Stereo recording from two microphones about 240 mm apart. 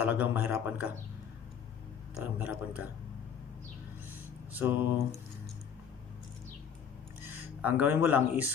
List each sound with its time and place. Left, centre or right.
0.0 s speech: centre
2.1 s speech: centre
4.6 s speech: centre
7.2 s speech: centre